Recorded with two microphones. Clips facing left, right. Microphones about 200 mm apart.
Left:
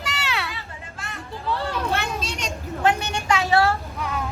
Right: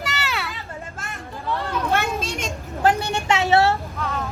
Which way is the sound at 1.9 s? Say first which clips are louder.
Right 3 dB; 50° right (ahead or behind).